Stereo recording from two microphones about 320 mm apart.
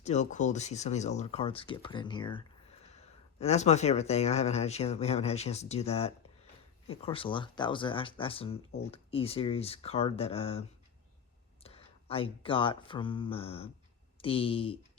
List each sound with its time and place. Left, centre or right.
0.0 s speech: left